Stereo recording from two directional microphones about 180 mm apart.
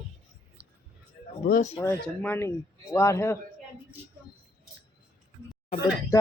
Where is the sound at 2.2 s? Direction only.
10° left (ahead or behind).